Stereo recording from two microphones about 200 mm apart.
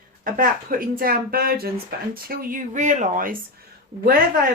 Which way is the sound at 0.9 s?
45° right (ahead or behind).